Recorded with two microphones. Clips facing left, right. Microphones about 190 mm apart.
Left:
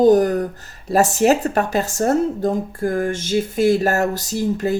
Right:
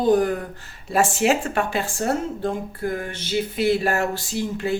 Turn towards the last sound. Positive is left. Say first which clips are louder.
# left 5 dB
turn(degrees=40)  # may be behind; listen again after turning